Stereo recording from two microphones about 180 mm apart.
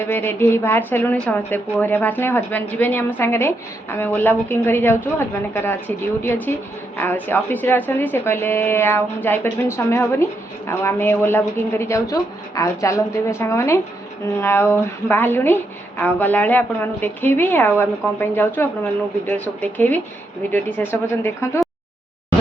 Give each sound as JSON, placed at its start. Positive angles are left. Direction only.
{"t": 0.0, "sound": "a woman's voice", "side_deg": 10}
{"t": 6.2, "sound": "a woman's voice", "side_deg": 10}